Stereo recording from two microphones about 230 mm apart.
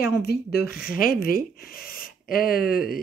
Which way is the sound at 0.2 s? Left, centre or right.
Left.